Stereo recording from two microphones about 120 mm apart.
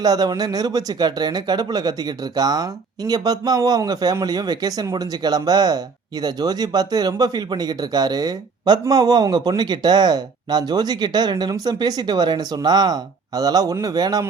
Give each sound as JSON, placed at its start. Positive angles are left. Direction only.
{"t": 0.0, "sound": "speech", "side_deg": -35}